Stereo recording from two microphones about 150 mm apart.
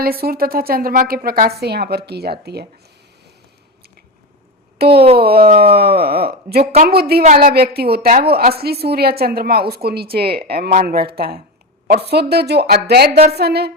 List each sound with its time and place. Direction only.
0.0 s a woman's voice: 90° right
4.8 s a woman's voice: 90° right
7.2 s a woman's voice: 45° right (ahead or behind)
7.4 s a woman's voice: 90° right